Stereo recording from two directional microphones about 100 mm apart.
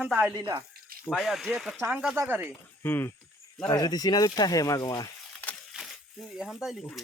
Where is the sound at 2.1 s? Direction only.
20° right (ahead or behind).